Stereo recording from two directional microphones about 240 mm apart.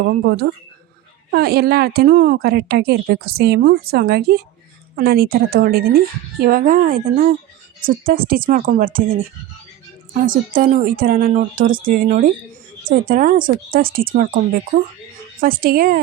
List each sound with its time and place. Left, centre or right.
0.0 s a woman's voice: right
10.2 s a woman's voice: right